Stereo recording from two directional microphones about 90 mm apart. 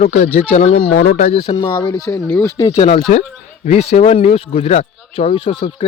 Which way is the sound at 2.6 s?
80° left.